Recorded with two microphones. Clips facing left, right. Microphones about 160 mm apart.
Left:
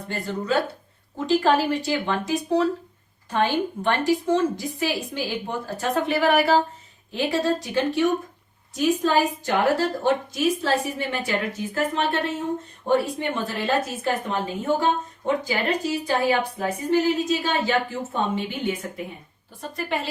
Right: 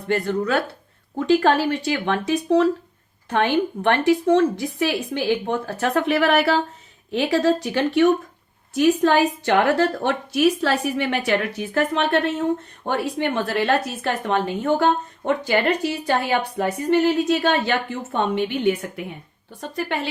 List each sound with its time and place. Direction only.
0.1 s a woman's voice: 65° right (ahead or behind)